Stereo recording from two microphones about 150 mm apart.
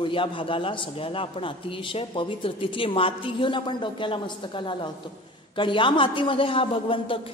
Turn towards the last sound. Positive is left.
turn(degrees=35)  # may be behind; listen again after turning